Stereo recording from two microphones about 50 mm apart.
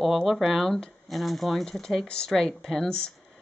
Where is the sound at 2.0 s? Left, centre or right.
Centre.